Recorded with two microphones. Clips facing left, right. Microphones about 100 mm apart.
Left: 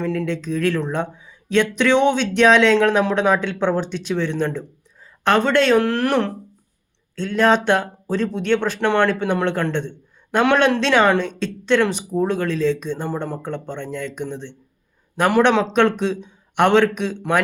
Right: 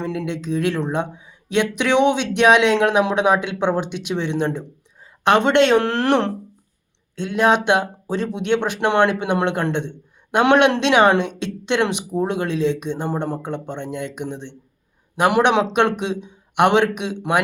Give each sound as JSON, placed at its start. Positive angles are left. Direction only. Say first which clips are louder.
{"t": 0.0, "sound": "speech", "louder": "left 2 dB", "side_deg": -15}